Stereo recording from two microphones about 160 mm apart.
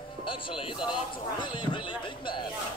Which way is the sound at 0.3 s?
35° left (ahead or behind).